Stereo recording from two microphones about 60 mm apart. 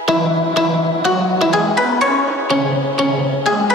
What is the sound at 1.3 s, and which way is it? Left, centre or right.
Music, centre.